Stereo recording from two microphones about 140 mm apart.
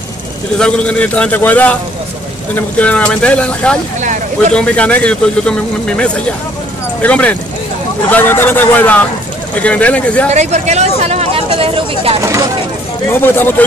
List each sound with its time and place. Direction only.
0.6 s speech: 5° left (ahead or behind)
10.3 s speech: 55° right (ahead or behind)
12.2 s speech: 20° right (ahead or behind)
13.1 s speech: 15° left (ahead or behind)